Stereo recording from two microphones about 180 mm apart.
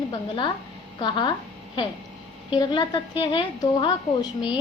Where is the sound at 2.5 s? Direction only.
25° left (ahead or behind).